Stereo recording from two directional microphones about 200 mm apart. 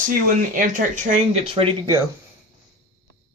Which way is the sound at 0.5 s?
40° right (ahead or behind).